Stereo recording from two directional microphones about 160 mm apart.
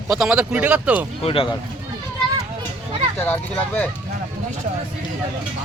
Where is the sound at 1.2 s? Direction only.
35° left (ahead or behind).